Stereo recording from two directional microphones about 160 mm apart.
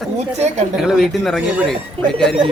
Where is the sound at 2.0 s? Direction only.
35° right (ahead or behind).